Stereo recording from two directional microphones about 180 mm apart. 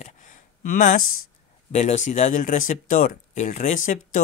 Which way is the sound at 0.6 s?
50° left (ahead or behind).